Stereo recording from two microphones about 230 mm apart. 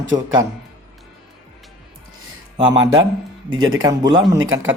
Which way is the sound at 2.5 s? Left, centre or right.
Centre.